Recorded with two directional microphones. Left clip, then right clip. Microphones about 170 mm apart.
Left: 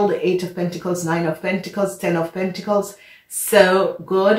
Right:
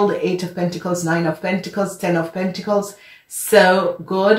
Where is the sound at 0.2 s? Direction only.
30° right (ahead or behind).